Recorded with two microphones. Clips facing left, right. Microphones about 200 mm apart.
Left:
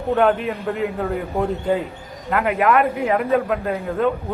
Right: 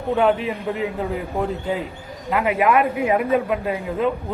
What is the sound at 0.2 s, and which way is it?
Speech, centre (ahead or behind).